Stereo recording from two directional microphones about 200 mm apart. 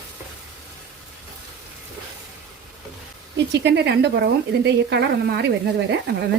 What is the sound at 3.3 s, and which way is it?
A woman's voice, 60° right (ahead or behind).